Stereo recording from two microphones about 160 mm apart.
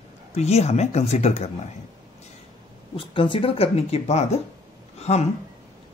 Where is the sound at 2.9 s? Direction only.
35° left (ahead or behind).